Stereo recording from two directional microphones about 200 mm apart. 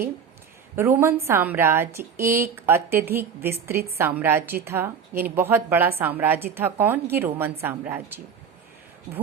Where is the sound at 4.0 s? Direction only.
10° right (ahead or behind).